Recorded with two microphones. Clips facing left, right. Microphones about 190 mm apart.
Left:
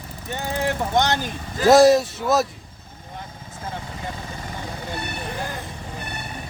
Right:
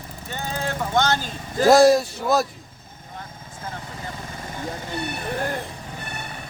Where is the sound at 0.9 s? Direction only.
20° left (ahead or behind).